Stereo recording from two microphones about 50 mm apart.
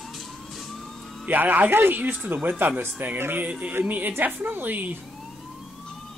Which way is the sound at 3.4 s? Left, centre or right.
Right.